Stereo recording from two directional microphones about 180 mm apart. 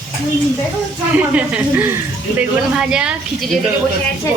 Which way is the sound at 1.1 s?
5° right (ahead or behind).